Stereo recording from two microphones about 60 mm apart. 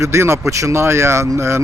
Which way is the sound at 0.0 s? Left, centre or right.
Right.